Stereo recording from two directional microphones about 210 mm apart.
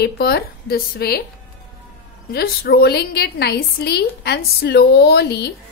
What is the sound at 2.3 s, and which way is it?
A woman's voice, 50° left (ahead or behind).